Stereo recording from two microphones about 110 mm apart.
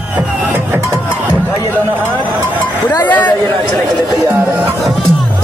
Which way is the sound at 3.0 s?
15° left (ahead or behind).